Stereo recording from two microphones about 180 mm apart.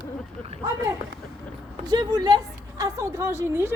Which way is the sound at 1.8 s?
25° right (ahead or behind).